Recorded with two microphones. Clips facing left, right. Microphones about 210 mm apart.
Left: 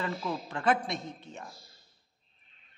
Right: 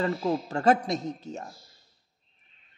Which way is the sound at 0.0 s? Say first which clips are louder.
Right 7 dB; 40° right (ahead or behind).